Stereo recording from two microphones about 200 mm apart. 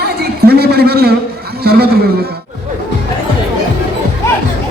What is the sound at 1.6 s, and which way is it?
Speech, 50° right (ahead or behind).